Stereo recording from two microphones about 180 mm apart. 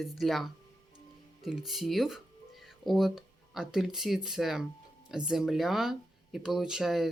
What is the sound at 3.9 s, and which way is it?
Speech, centre (ahead or behind).